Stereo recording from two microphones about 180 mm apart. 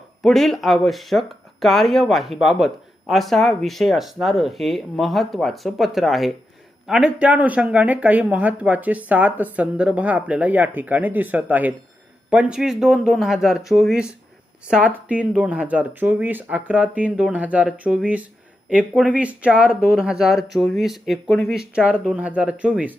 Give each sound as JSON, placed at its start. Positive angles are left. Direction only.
{"t": 0.2, "sound": "speech", "side_deg": 0}